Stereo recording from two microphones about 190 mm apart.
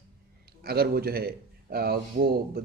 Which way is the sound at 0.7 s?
55° right (ahead or behind).